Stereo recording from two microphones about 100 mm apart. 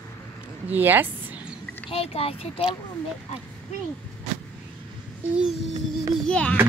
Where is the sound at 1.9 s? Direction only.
70° left (ahead or behind).